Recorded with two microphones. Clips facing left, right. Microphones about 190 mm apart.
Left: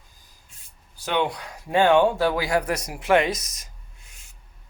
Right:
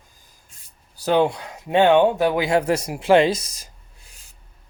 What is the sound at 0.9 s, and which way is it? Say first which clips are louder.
Speech: right 6 dB; 35° right (ahead or behind).